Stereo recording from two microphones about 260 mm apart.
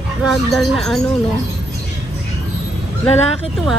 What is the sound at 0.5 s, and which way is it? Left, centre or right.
Speech, centre.